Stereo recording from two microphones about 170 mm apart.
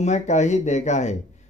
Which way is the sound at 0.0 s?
45° left (ahead or behind).